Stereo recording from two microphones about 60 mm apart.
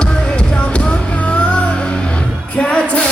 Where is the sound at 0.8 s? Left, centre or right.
Left.